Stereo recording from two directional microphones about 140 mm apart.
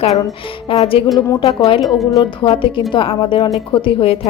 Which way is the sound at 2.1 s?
35° left (ahead or behind).